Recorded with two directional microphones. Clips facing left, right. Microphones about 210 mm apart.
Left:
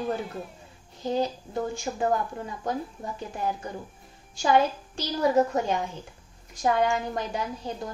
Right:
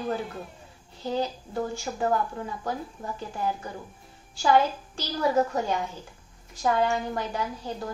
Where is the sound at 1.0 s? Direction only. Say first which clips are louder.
Left 2 dB; 15° left (ahead or behind).